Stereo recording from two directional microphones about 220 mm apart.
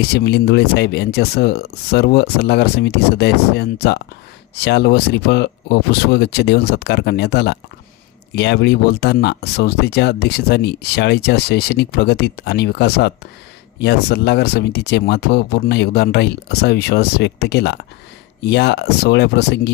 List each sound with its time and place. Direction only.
0.0 s speech: 50° left (ahead or behind)